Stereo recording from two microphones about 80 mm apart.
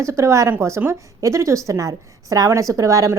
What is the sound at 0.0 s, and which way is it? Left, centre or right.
A woman's voice, right.